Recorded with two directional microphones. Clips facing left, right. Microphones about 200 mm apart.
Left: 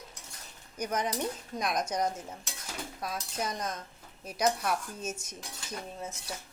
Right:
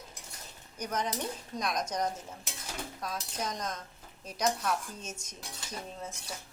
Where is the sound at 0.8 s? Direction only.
10° left (ahead or behind).